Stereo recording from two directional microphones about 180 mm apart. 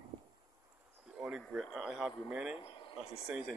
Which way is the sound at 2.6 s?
30° left (ahead or behind).